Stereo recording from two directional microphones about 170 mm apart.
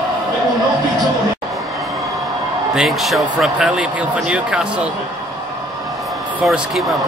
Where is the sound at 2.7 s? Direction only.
Centre (ahead or behind).